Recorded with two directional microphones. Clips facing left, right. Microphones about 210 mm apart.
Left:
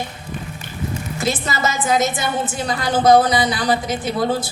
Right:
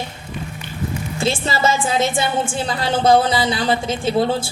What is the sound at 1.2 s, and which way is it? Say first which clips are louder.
A woman's voice: right 2 dB; 30° right (ahead or behind).